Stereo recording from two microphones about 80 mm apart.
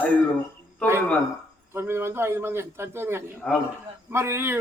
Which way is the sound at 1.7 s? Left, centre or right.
Right.